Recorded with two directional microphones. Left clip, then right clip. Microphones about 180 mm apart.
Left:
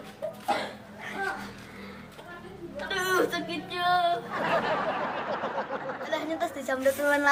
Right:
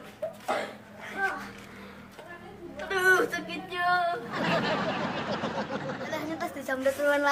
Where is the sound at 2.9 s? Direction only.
20° right (ahead or behind).